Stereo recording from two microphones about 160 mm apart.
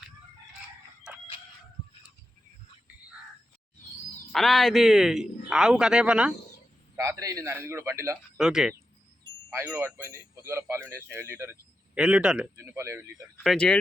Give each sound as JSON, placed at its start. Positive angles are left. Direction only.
{"t": 4.3, "sound": "a man's voice", "side_deg": 0}
{"t": 6.9, "sound": "speech", "side_deg": -15}
{"t": 8.4, "sound": "a man's voice", "side_deg": -5}
{"t": 9.5, "sound": "speech", "side_deg": -15}
{"t": 13.4, "sound": "a man's voice", "side_deg": 5}